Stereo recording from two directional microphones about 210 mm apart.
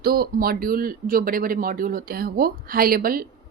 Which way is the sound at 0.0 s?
45° right (ahead or behind).